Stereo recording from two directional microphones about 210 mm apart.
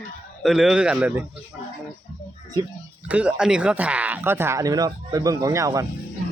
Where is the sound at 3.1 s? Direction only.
5° right (ahead or behind).